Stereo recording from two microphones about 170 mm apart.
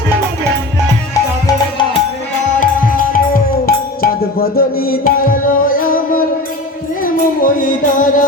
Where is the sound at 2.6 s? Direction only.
55° left (ahead or behind).